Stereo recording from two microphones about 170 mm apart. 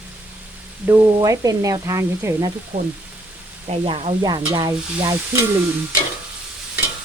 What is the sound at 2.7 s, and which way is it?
Speech, 60° right (ahead or behind).